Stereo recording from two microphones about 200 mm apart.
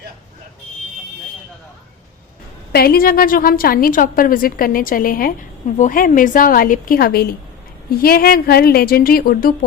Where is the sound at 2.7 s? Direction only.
50° left (ahead or behind).